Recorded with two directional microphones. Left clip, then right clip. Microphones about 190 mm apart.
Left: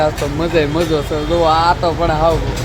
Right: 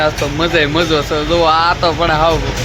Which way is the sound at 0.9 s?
15° right (ahead or behind).